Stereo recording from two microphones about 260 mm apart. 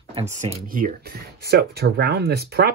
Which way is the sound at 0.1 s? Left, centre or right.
Right.